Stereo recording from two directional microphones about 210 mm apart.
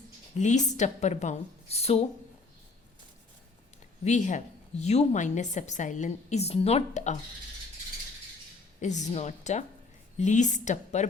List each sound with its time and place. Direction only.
0.3 s a woman's voice: 35° left (ahead or behind)
4.0 s a woman's voice: 35° left (ahead or behind)
8.8 s a woman's voice: 35° left (ahead or behind)